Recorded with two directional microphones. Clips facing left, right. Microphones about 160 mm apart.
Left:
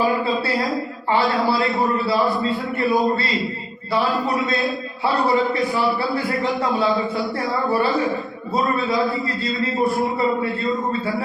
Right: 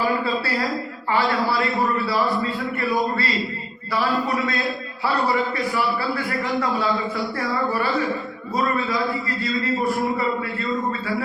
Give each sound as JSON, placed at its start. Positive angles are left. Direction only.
{"t": 1.1, "sound": "a man's voice", "side_deg": 25}
{"t": 5.0, "sound": "a man's voice", "side_deg": 25}